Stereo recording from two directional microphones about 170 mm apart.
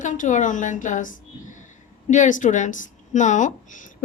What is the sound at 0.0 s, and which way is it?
A woman's voice, 45° left (ahead or behind).